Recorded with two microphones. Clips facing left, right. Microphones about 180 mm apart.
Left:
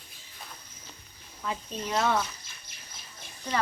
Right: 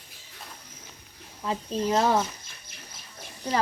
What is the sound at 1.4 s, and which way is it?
Speech, 30° right (ahead or behind).